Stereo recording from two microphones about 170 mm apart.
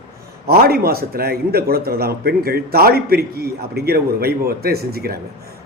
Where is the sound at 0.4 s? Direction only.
65° right (ahead or behind).